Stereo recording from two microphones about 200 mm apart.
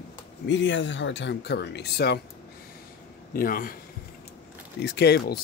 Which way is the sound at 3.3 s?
45° left (ahead or behind).